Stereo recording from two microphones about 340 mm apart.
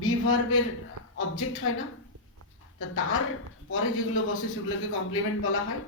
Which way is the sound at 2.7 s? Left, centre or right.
Left.